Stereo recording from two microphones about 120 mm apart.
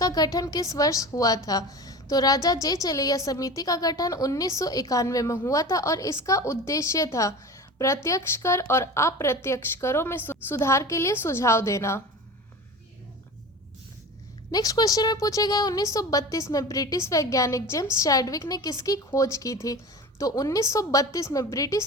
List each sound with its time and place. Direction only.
0.0 s speech: 30° left (ahead or behind)
14.5 s speech: 30° left (ahead or behind)